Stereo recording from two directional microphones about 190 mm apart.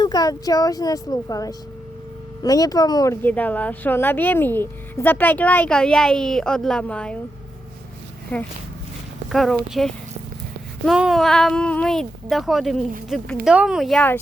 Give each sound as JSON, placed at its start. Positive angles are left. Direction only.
{"t": 0.0, "sound": "speech", "side_deg": 20}
{"t": 8.3, "sound": "speech", "side_deg": 10}
{"t": 10.8, "sound": "speech", "side_deg": 0}